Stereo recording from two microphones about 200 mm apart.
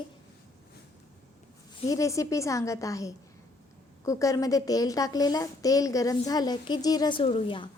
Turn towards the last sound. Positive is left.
turn(degrees=25)  # may be behind; listen again after turning